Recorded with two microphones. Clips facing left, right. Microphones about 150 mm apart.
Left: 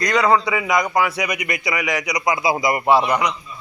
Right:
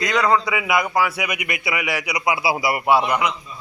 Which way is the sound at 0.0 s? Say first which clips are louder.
Left 2 dB; centre (ahead or behind).